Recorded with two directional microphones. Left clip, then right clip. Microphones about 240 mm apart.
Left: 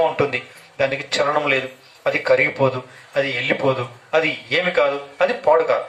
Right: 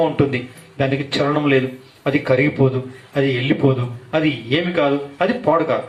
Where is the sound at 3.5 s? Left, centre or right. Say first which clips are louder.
Right 1 dB; left.